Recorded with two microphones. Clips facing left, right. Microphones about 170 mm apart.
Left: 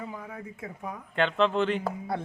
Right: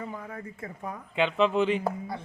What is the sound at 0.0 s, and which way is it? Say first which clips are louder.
Speech: right 1 dB; 5° left (ahead or behind).